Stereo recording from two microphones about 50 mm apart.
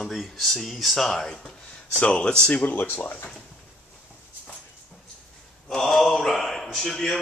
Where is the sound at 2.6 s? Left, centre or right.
Left.